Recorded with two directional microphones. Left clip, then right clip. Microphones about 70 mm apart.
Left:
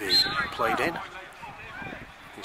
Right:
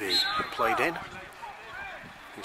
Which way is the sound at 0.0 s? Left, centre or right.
Left.